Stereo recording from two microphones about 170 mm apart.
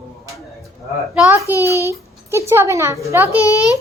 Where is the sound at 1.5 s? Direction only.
20° left (ahead or behind).